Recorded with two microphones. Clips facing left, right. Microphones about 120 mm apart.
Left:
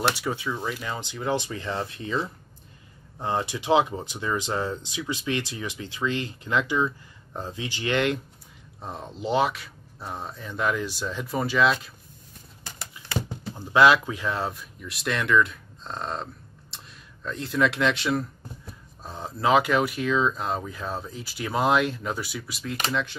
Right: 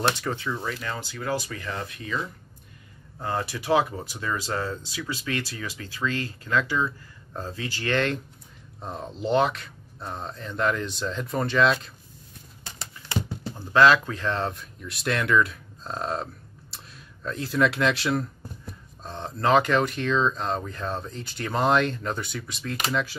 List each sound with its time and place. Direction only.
0.1 s speech: 10° left (ahead or behind)
8.8 s speech: centre (ahead or behind)
13.6 s speech: 15° left (ahead or behind); by 23.1 s centre (ahead or behind)